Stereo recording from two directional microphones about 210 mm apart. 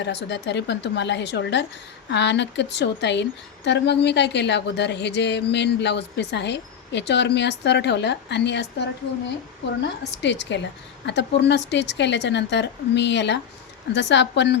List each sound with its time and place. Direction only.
0.0 s a woman's voice: 55° left (ahead or behind)
10.0 s a woman's voice: 55° left (ahead or behind)